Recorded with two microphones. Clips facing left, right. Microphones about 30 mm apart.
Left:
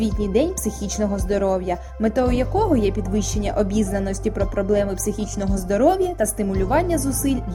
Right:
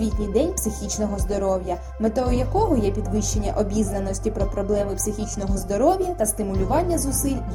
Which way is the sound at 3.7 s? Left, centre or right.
Left.